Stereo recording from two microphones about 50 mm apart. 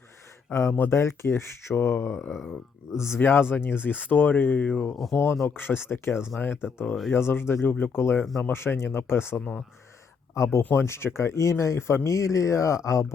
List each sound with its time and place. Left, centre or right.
0.5 s speech: left
3.2 s speech: left
4.7 s speech: centre
5.1 s speech: left
5.5 s speech: left
8.2 s speech: centre
8.5 s speech: left
9.4 s speech: left
10.3 s speech: left
10.8 s speech: left
12.0 s speech: left